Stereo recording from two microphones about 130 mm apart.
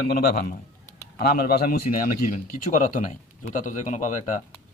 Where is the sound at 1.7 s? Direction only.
90° left; by 4.4 s 75° left (ahead or behind).